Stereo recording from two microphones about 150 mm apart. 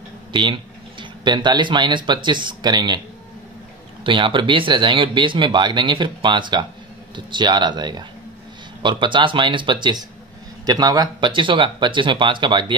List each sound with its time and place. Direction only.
0.3 s speech: 30° right (ahead or behind)
4.0 s a man's voice: 35° right (ahead or behind)